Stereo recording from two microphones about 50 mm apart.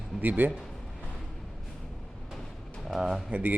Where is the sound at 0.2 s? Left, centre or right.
Right.